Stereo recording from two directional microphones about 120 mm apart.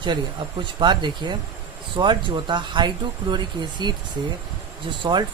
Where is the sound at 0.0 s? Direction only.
40° right (ahead or behind).